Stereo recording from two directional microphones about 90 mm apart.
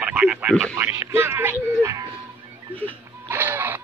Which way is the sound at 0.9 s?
30° right (ahead or behind).